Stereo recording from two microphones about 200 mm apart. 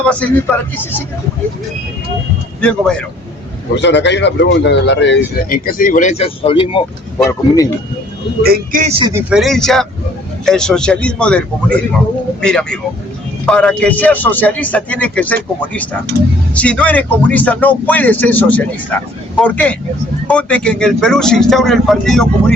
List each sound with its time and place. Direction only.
0.1 s speech: 5° left (ahead or behind)
2.6 s speech: 5° left (ahead or behind)
3.8 s speech: 60° left (ahead or behind); by 6.8 s 25° left (ahead or behind)
7.3 s speech: 15° left (ahead or behind)
8.4 s a man's voice: 45° right (ahead or behind)
8.9 s speech: 25° right (ahead or behind)
9.1 s speech: centre (ahead or behind)